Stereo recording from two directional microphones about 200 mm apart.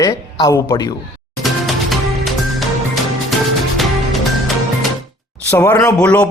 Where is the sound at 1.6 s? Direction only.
Centre (ahead or behind).